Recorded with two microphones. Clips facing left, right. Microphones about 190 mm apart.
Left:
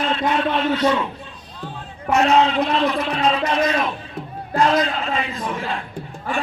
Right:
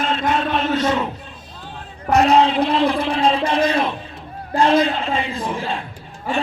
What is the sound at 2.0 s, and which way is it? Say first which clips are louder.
A man's voice: right 2 dB; 35° right (ahead or behind).